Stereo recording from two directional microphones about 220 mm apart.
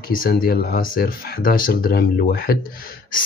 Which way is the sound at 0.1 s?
40° left (ahead or behind).